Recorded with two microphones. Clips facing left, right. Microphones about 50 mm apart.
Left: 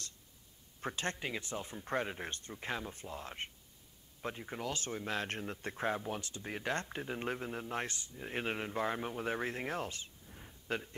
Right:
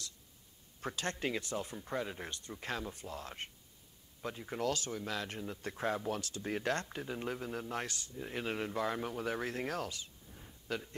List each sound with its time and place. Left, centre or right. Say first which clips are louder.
0.7 s speech: left 1 dB; left
1.1 s speech: right 3 dB; centre
1.4 s speech: right 2 dB; left
2.6 s speech: even; centre
4.5 s speech: right 7 dB; centre
4.7 s speech: left 1 dB; left
5.9 s speech: right 2 dB; centre
6.4 s speech: right 5 dB; centre
6.7 s speech: right 1 dB; left
10.2 s a sound: left 1 dB; centre